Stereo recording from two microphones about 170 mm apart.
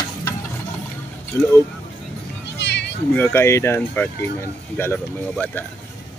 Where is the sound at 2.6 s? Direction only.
90° left.